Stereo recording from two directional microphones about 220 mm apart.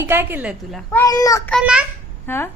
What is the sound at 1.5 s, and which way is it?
Speech, 5° right (ahead or behind).